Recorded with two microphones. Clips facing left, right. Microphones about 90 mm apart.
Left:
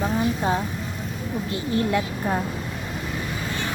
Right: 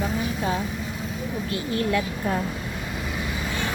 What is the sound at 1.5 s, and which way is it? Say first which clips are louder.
Speech: left 2 dB; 25° left (ahead or behind).